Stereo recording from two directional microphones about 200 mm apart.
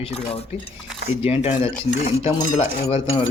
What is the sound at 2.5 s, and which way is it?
Speech, 35° left (ahead or behind).